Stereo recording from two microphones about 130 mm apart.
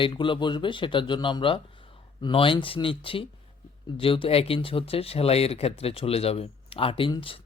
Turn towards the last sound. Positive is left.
turn(degrees=40)  # may be behind; listen again after turning